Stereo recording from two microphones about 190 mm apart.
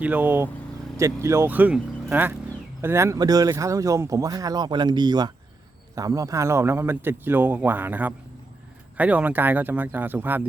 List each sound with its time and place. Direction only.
0.0 s a man's voice: 10° right (ahead or behind)